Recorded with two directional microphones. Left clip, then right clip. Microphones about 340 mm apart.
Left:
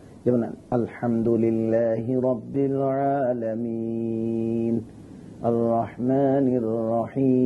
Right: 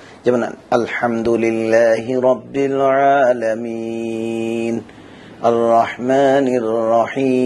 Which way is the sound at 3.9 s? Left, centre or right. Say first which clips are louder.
Right 6 dB; right.